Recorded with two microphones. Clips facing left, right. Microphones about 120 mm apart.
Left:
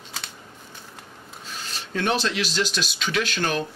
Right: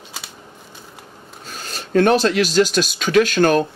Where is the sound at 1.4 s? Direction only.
45° right (ahead or behind).